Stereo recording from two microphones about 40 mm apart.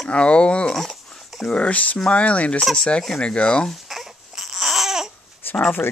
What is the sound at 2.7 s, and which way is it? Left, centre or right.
Speech, centre.